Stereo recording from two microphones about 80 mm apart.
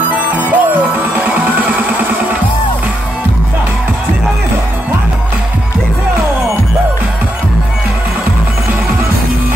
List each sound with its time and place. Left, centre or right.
0.1 s music: centre